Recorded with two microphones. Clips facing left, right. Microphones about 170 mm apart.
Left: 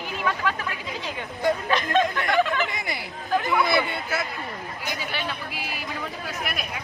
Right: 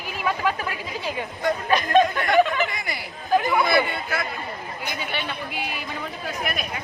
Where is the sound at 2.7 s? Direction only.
25° left (ahead or behind).